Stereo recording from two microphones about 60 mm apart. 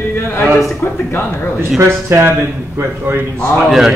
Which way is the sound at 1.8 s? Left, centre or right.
Right.